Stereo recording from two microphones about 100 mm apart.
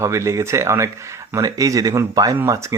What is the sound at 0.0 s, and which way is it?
Speech, 30° right (ahead or behind).